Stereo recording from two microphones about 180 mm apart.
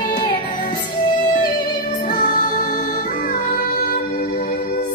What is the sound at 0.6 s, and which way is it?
Music, 40° left (ahead or behind).